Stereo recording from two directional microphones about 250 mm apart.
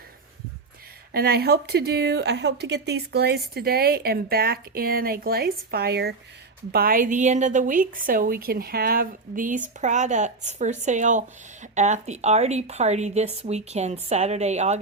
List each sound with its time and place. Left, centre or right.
1.1 s a woman's voice: right